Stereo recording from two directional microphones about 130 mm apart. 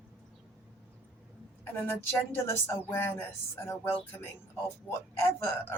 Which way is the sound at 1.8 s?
20° left (ahead or behind).